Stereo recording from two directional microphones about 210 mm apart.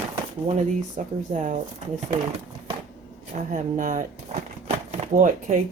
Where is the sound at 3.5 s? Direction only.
40° right (ahead or behind).